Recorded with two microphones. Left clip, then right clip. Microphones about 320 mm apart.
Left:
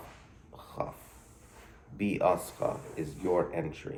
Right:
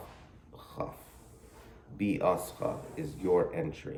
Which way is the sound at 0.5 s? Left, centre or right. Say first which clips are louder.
Left 1 dB; centre.